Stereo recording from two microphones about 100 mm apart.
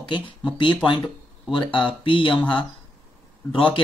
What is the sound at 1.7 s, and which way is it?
Speech, 60° left (ahead or behind).